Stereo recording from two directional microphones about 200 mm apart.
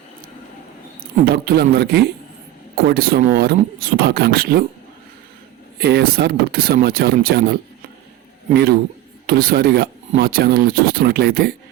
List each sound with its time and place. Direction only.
0.9 s a man's voice: 50° right (ahead or behind)
5.8 s speech: 50° right (ahead or behind)
9.2 s speech: 45° right (ahead or behind)